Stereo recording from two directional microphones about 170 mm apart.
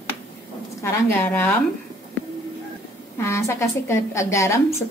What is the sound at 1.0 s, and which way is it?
Speech, 10° left (ahead or behind).